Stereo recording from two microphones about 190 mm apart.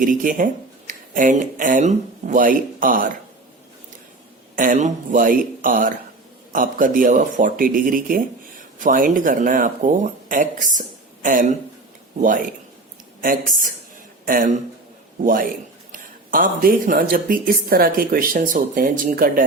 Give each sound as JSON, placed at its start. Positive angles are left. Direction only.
{"t": 0.0, "sound": "speech", "side_deg": -45}
{"t": 4.5, "sound": "speech", "side_deg": -45}